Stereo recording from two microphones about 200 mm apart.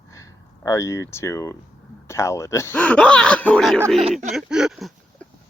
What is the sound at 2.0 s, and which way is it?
Speech, 15° left (ahead or behind).